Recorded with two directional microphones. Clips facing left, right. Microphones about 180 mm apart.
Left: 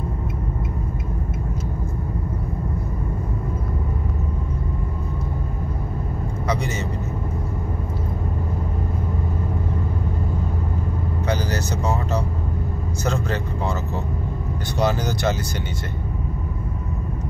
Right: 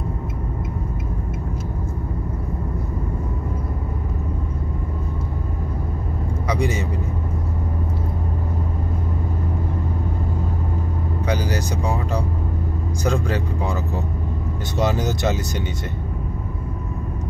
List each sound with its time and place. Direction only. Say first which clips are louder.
11.2 s vehicle: right 1 dB; 10° right (ahead or behind)
13.0 s speech: right 2 dB; 15° right (ahead or behind)
14.8 s speech: right 1 dB; 20° right (ahead or behind)